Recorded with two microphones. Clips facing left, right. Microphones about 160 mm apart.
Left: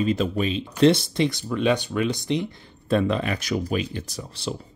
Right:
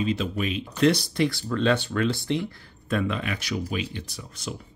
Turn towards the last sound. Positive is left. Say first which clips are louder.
# left 5 dB
turn(degrees=35)  # may be behind; listen again after turning